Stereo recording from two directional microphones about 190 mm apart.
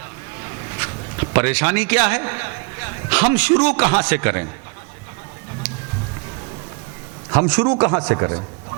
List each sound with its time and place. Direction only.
0.4 s speech: 20° right (ahead or behind)
7.3 s a man's voice: 25° right (ahead or behind)